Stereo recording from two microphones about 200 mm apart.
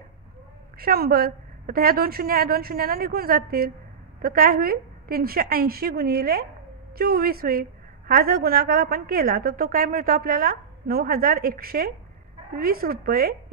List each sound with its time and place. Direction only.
0.7 s a woman's voice: 50° right (ahead or behind)